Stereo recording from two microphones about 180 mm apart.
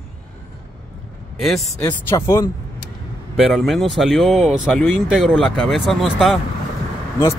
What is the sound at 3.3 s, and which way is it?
Speech, centre (ahead or behind).